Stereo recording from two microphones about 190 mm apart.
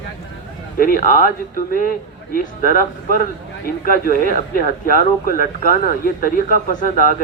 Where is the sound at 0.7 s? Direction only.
50° left (ahead or behind).